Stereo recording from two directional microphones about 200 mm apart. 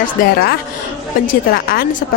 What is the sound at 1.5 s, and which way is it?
Speech, 50° left (ahead or behind).